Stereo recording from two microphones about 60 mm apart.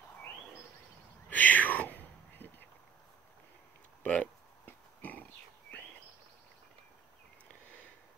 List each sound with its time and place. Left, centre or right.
1.3 s whispering: left
4.0 s a sound: centre
4.6 s pig: left